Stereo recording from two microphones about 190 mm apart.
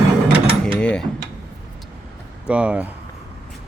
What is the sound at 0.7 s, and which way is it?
Speech, 5° left (ahead or behind).